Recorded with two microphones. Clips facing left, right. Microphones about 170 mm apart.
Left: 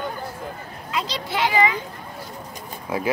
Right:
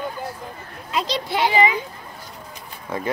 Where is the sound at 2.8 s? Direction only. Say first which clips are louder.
Left 2 dB; 5° left (ahead or behind).